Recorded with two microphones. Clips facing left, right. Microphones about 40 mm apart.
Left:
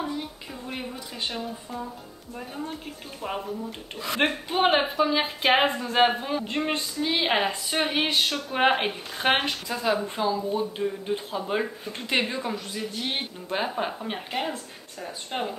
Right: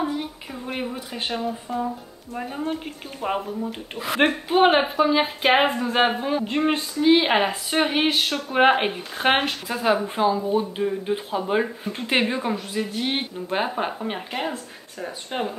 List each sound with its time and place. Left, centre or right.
0.0 s a sound: right
0.9 s speech: right
1.4 s speech: centre
4.2 s speech: centre
9.5 s speech: right